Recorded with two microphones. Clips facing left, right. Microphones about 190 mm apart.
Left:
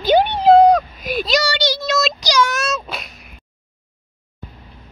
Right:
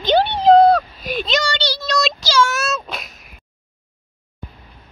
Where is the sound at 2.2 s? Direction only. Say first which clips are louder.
Right 1 dB; 15° left (ahead or behind).